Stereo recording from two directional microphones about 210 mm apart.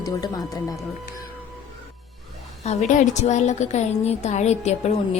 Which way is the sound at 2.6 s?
35° left (ahead or behind).